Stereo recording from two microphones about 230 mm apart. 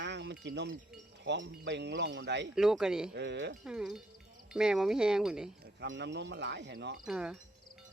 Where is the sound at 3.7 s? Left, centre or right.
Centre.